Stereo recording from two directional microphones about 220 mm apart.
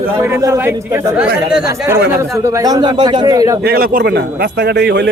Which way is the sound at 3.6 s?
45° right (ahead or behind).